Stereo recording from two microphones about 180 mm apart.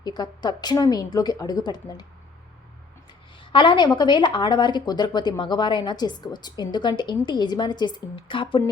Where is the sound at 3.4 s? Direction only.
25° left (ahead or behind).